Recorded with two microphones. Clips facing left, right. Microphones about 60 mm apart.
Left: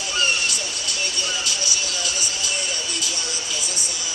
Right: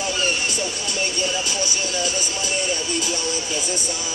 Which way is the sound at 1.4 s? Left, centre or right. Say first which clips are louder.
Right 2 dB; right.